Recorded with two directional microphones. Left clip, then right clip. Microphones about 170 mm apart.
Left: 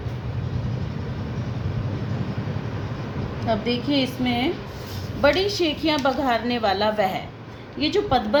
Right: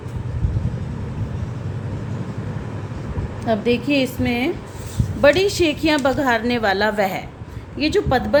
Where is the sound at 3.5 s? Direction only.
55° right (ahead or behind).